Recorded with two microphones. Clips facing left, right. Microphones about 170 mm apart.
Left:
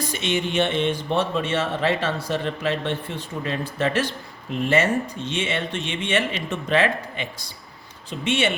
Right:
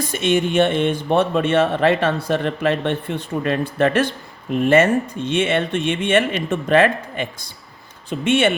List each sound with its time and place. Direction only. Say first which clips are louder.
0.0 s speech: right 6 dB; 50° right (ahead or behind)